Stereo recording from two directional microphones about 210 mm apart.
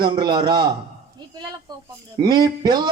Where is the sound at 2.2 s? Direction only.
20° right (ahead or behind).